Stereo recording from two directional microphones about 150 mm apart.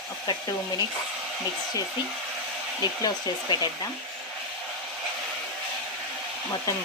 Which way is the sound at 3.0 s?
25° left (ahead or behind).